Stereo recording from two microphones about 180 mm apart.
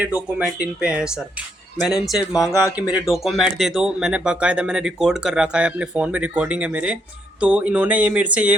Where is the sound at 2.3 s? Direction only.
20° left (ahead or behind).